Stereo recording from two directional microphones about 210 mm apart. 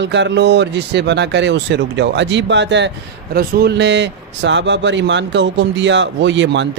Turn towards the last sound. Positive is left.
turn(degrees=-60)  # may be behind; listen again after turning